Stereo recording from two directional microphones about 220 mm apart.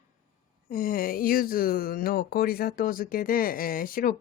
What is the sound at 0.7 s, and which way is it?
Speech, 40° left (ahead or behind).